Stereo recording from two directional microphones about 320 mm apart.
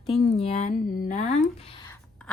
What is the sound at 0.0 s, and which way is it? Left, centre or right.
Speech, centre.